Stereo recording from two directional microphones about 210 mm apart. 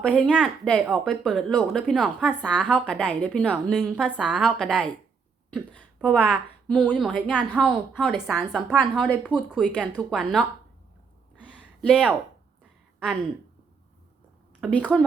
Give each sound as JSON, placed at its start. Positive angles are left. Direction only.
{"t": 0.0, "sound": "speech", "side_deg": 5}
{"t": 6.3, "sound": "a woman's voice", "side_deg": -5}
{"t": 9.2, "sound": "speech", "side_deg": -5}
{"t": 11.8, "sound": "speech", "side_deg": 0}
{"t": 14.6, "sound": "speech", "side_deg": -5}